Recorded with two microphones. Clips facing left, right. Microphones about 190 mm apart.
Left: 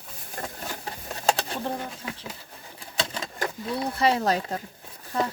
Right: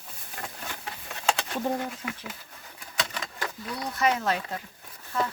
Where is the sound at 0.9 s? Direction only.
35° left (ahead or behind).